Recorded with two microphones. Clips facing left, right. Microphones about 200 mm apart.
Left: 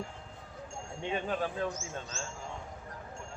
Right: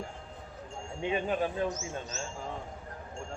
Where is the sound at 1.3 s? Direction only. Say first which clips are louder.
Right 3 dB; 20° right (ahead or behind).